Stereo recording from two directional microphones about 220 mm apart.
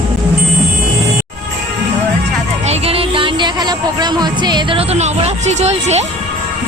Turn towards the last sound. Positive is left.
turn(degrees=-30)  # may be behind; listen again after turning